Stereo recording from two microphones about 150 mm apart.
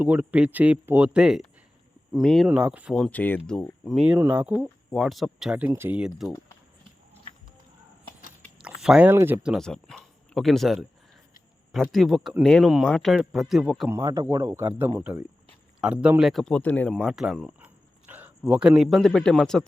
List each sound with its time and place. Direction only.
0.0 s speech: 10° right (ahead or behind)
2.9 s speech: 5° left (ahead or behind)
3.8 s speech: 5° right (ahead or behind)
4.9 s speech: centre (ahead or behind)
8.6 s a sound: 5° right (ahead or behind)
9.0 s speech: 15° right (ahead or behind)
14.0 s speech: 20° right (ahead or behind); by 16.9 s 10° left (ahead or behind)
16.9 s speech: centre (ahead or behind)